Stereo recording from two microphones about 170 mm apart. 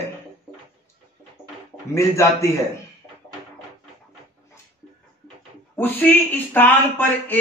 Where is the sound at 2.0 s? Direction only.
15° left (ahead or behind).